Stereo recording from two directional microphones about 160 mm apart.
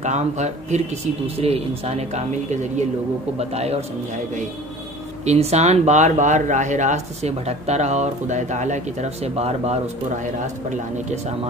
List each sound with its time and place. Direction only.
0.0 s a man's voice: 45° right (ahead or behind)
5.2 s speech: 45° right (ahead or behind)